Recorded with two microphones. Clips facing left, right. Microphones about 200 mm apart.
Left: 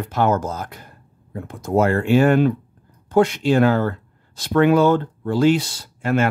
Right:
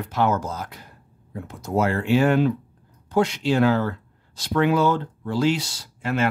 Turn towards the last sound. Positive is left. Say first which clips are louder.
# left 5 dB
turn(degrees=50)  # may be behind; listen again after turning